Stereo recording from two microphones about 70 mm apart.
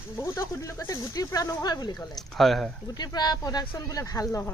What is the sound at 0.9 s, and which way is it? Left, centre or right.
Speech, left.